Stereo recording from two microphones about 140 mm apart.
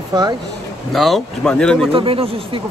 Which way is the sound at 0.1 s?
30° right (ahead or behind).